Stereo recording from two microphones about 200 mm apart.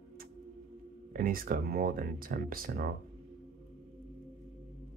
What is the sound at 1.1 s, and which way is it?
Speech, 45° right (ahead or behind).